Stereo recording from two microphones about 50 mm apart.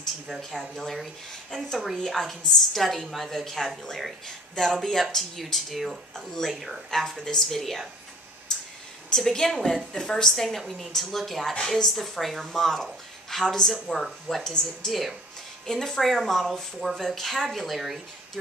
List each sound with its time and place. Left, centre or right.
0.0 s a woman's voice: centre
8.5 s clicking: centre
9.1 s a woman's voice: centre
14.4 s a woman's voice: centre